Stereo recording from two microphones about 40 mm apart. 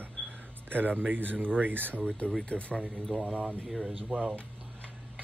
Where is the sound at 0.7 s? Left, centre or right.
Right.